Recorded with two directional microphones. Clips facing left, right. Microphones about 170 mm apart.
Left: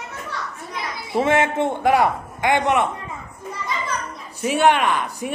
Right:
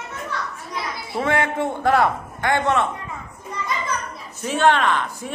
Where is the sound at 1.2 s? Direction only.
20° left (ahead or behind).